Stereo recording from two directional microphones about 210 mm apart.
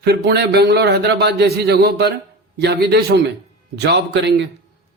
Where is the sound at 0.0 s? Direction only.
50° right (ahead or behind).